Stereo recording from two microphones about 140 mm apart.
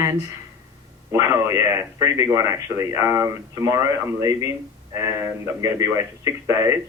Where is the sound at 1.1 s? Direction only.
20° right (ahead or behind).